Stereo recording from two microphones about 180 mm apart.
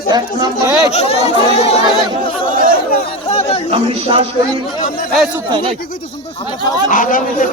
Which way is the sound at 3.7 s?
30° right (ahead or behind).